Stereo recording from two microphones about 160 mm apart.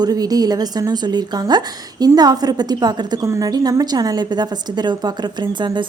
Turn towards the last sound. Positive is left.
turn(degrees=-30)  # may be behind; listen again after turning